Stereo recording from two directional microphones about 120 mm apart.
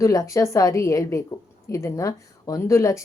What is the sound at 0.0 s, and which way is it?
A woman's voice, 25° left (ahead or behind).